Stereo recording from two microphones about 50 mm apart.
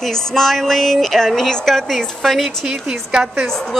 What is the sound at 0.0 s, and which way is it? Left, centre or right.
Speech, centre.